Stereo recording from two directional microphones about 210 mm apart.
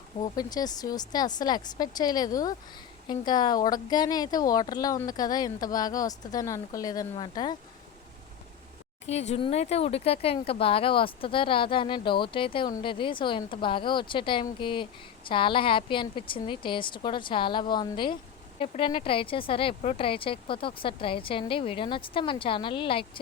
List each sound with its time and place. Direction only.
0.2 s speech: 20° left (ahead or behind)
9.0 s speech: 30° left (ahead or behind)